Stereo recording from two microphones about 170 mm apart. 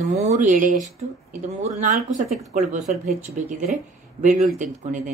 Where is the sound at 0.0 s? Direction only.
45° right (ahead or behind).